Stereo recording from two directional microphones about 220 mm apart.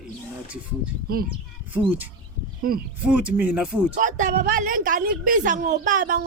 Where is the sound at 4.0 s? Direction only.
35° right (ahead or behind).